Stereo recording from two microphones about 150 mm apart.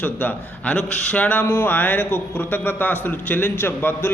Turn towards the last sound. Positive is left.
turn(degrees=15)  # may be behind; listen again after turning